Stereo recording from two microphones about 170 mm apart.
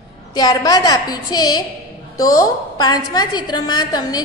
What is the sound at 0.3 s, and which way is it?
A woman's voice, 25° left (ahead or behind).